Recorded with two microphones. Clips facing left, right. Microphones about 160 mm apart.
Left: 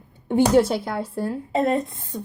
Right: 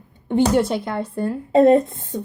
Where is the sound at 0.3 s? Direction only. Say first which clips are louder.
Even; 10° left (ahead or behind).